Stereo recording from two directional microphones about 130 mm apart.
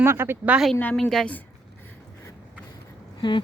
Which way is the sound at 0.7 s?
15° left (ahead or behind).